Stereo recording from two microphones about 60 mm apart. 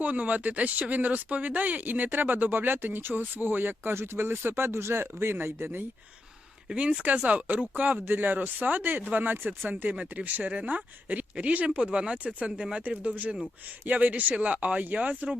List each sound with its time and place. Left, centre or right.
0.0 s speech: right
6.7 s speech: right
9.6 s speech: right